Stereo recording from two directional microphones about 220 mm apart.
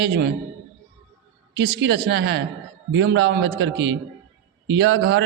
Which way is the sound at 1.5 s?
55° right (ahead or behind).